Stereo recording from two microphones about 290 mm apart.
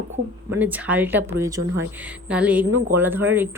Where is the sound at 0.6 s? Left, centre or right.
Centre.